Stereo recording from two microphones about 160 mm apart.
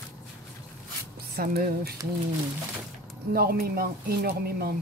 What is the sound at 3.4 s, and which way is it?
Speech, 70° right (ahead or behind).